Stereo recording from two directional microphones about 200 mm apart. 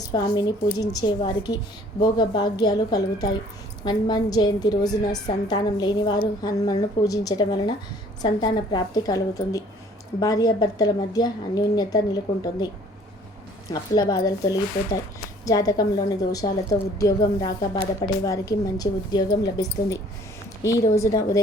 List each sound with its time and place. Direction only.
0.1 s a woman's voice: 20° left (ahead or behind)
13.7 s a woman's voice: 20° left (ahead or behind)